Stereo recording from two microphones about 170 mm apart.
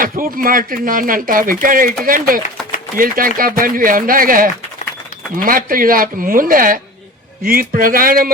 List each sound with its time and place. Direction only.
0.0 s speech: 55° right (ahead or behind)